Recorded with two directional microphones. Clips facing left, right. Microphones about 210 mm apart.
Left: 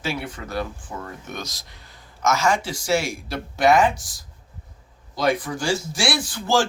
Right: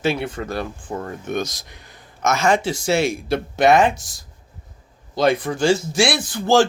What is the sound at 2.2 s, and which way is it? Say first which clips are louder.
Speech: right 3 dB; 55° right (ahead or behind).